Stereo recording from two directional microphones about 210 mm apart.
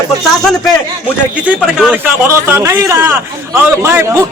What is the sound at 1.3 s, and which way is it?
A man's voice, 5° right (ahead or behind).